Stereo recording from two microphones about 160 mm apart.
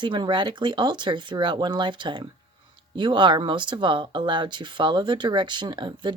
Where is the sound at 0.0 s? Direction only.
30° right (ahead or behind).